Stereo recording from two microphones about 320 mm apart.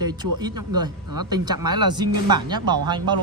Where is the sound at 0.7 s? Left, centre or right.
Right.